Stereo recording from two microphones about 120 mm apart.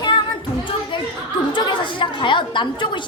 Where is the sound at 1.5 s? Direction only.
40° left (ahead or behind).